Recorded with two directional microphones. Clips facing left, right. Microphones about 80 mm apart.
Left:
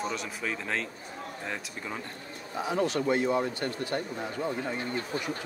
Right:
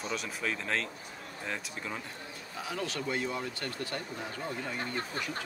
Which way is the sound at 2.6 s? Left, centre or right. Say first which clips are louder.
Left 8 dB; left.